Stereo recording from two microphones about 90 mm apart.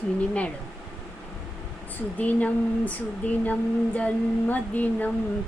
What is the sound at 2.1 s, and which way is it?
Speech, 15° left (ahead or behind).